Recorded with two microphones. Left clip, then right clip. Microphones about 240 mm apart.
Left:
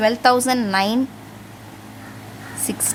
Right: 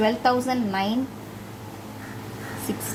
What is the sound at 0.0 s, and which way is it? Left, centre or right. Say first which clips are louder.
Speech: left 6 dB; left.